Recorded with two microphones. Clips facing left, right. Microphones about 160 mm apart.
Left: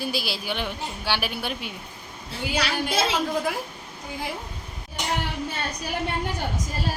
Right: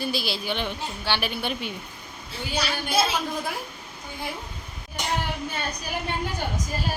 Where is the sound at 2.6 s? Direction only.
90° left.